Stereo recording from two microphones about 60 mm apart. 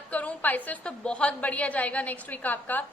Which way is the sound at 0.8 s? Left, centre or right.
Centre.